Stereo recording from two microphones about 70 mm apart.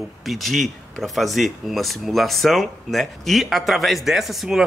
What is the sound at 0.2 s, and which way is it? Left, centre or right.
Speech, centre.